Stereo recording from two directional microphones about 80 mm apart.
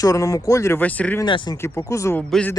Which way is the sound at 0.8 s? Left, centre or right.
Centre.